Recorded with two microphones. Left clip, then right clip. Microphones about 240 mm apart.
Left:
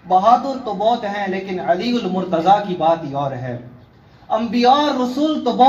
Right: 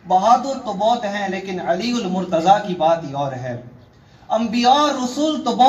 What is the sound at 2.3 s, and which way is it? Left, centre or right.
Speech, right.